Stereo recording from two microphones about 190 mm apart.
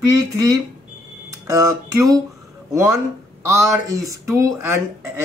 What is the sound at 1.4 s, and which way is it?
A man's voice, 15° right (ahead or behind).